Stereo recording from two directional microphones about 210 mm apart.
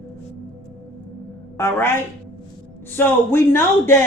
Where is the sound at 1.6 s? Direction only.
10° left (ahead or behind).